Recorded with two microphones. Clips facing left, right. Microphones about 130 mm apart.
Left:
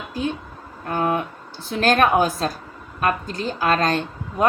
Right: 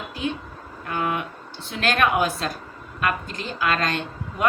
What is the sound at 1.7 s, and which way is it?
A woman's voice, 35° left (ahead or behind).